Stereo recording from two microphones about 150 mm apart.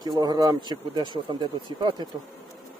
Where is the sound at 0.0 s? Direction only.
25° right (ahead or behind).